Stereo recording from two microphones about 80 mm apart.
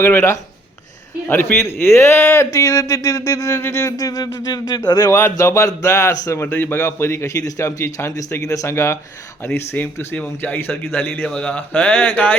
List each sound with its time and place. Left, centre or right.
0.0 s speech: left
5.0 s speech: left
8.7 s speech: left
9.6 s a man's voice: left